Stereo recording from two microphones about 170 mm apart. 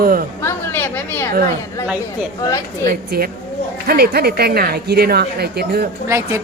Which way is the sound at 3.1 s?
65° right (ahead or behind).